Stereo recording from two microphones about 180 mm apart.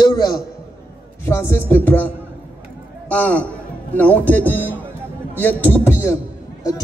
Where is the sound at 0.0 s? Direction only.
25° left (ahead or behind).